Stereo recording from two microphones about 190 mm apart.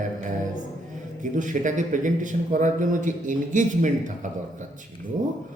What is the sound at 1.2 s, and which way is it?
A man's voice, 40° right (ahead or behind).